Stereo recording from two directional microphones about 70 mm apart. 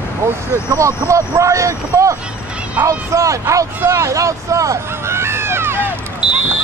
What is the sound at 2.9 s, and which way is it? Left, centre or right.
Speech, right.